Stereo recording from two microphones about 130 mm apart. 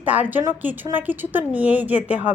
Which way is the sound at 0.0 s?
10° right (ahead or behind).